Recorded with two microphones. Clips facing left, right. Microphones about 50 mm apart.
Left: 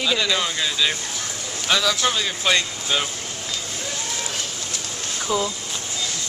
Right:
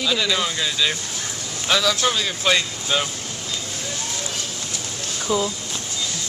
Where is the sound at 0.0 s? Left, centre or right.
Centre.